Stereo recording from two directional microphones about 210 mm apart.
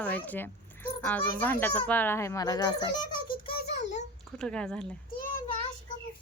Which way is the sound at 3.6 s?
35° left (ahead or behind).